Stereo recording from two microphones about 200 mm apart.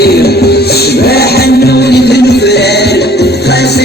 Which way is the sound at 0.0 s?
55° left (ahead or behind).